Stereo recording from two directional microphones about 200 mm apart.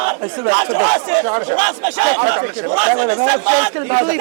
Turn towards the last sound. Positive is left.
turn(degrees=-20)  # may be behind; listen again after turning